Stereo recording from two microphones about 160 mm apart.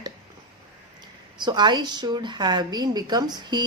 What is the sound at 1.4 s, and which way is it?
A woman's voice, 25° right (ahead or behind).